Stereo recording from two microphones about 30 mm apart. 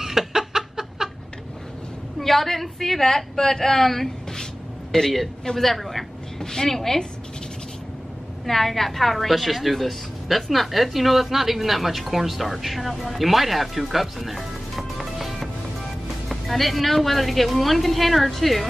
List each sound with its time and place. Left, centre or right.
0.0 s chicken: centre
2.1 s a woman's voice: centre
4.9 s a man's voice: centre
5.6 s a woman's voice: centre
6.4 s a woman's voice: centre
8.5 s a woman's voice: centre
15.1 s music: centre
16.3 s speech: centre